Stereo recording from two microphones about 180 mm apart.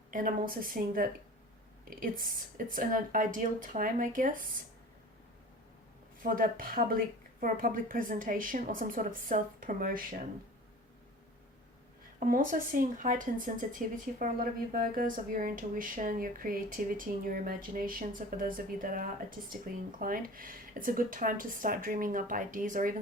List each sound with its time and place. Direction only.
0.1 s speech: 50° right (ahead or behind)
2.2 s speech: 50° right (ahead or behind)
6.2 s speech: 50° right (ahead or behind)
12.2 s speech: 50° right (ahead or behind)